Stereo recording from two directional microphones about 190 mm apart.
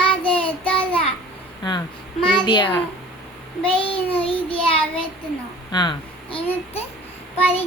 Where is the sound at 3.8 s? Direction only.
30° left (ahead or behind).